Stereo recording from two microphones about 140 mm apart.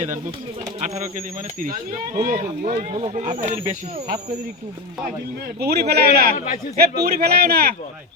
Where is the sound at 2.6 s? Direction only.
90° right.